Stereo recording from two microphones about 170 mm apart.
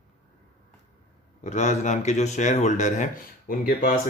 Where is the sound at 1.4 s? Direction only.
40° left (ahead or behind).